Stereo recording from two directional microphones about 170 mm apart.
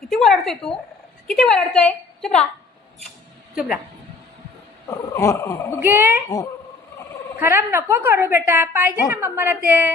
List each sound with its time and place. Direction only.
0.1 s a woman's voice: centre (ahead or behind)
3.5 s a woman's voice: 5° right (ahead or behind)
5.1 s speech: 15° left (ahead or behind)
5.8 s a woman's voice: 10° right (ahead or behind)
7.3 s a woman's voice: 10° right (ahead or behind)